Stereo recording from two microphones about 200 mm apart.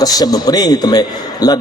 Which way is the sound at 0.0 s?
20° left (ahead or behind).